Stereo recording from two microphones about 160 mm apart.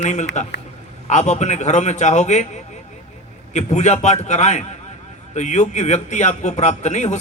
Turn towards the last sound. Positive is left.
turn(degrees=45)  # may be behind; listen again after turning